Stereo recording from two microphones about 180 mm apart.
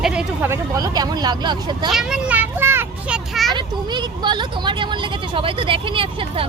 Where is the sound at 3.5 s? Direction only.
25° right (ahead or behind).